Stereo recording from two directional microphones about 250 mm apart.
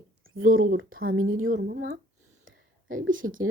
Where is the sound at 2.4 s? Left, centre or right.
Right.